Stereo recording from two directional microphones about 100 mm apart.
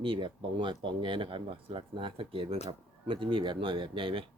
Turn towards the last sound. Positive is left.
turn(degrees=-60)  # may be behind; listen again after turning